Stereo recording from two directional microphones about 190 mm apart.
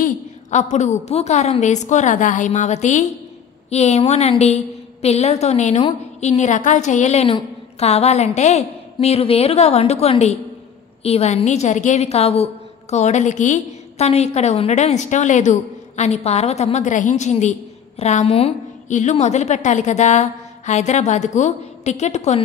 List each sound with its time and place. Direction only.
0.0 s a woman's voice: 40° left (ahead or behind)